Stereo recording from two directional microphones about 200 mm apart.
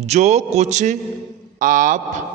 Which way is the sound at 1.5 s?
40° right (ahead or behind).